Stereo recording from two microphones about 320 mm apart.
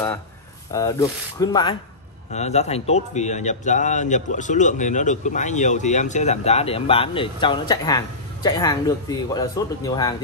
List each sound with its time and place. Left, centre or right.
0.7 s speech: centre